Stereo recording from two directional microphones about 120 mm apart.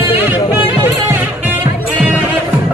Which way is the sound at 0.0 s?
15° right (ahead or behind).